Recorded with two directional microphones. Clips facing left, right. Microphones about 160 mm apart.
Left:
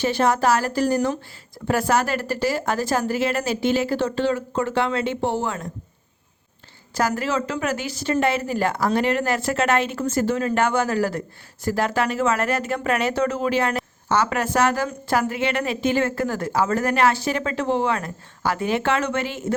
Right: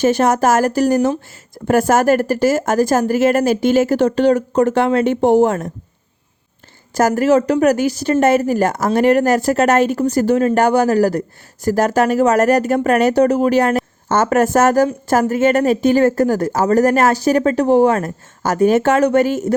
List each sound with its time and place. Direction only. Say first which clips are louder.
0.0 s a woman's voice: right 6 dB; 45° right (ahead or behind)
6.9 s a woman's voice: right 10 dB; 45° right (ahead or behind)